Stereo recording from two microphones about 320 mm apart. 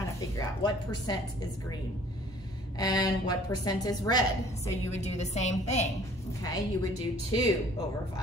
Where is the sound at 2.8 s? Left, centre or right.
Centre.